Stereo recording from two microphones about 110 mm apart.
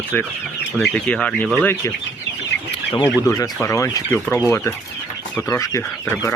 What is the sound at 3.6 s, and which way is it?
Speech, 30° left (ahead or behind).